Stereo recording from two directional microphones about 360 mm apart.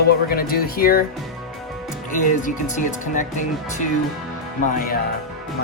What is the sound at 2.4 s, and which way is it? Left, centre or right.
Speech, left.